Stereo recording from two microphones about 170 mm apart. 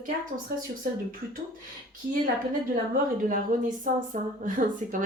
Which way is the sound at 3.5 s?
50° right (ahead or behind).